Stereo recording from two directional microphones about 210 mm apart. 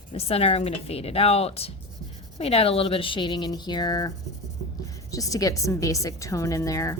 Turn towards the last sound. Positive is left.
turn(degrees=15)  # may be behind; listen again after turning